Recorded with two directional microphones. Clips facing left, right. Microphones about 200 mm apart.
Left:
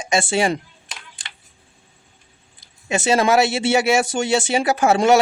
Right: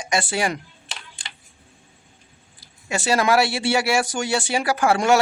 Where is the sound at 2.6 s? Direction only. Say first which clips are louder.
Left 5 dB; 20° left (ahead or behind).